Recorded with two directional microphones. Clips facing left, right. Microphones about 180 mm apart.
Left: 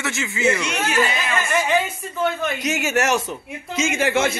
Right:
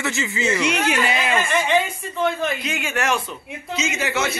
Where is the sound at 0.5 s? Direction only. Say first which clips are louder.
Right 4 dB; 10° right (ahead or behind).